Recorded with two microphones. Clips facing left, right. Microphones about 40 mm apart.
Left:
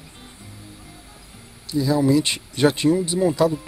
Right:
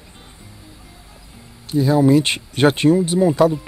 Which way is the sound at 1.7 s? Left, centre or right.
Right.